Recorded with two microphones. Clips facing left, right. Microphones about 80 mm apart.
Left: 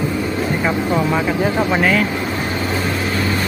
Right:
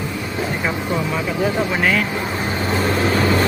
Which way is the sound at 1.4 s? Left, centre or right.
Left.